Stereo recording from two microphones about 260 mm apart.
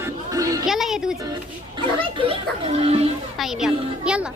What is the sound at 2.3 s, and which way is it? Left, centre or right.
Speech, right.